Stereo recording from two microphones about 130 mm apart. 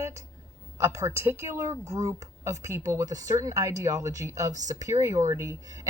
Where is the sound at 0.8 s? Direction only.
20° right (ahead or behind).